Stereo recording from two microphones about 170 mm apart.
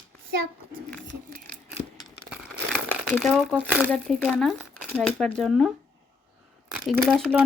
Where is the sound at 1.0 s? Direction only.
65° right (ahead or behind).